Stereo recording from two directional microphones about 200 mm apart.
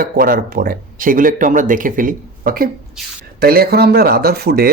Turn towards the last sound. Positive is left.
turn(degrees=-50)  # may be behind; listen again after turning